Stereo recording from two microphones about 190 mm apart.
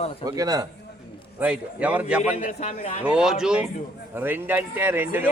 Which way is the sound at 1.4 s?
5° right (ahead or behind).